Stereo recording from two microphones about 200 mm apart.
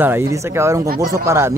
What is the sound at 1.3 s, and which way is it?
Speech, 15° right (ahead or behind).